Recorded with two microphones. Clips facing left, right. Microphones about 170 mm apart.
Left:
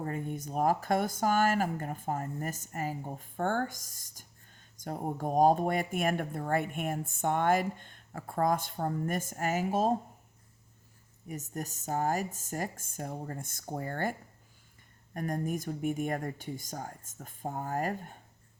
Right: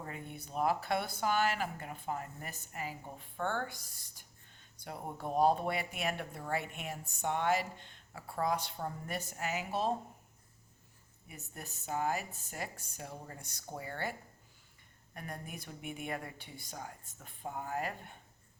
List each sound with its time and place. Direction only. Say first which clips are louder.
0.0 s speech: left 9 dB; 45° left (ahead or behind)
11.3 s speech: left 11 dB; 40° left (ahead or behind)